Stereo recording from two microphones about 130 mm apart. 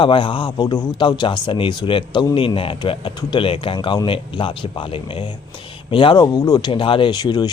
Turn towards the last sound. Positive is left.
turn(degrees=35)  # may be behind; listen again after turning